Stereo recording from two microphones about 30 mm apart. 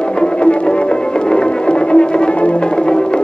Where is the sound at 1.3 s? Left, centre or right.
Left.